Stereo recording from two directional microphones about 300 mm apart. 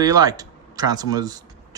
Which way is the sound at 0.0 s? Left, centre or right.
Centre.